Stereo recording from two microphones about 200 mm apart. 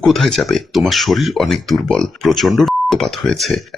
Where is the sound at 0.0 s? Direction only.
Centre (ahead or behind).